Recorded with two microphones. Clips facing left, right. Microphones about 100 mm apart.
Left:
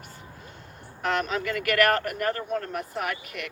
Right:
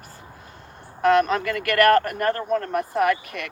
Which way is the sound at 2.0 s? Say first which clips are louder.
Right 6 dB; 40° right (ahead or behind).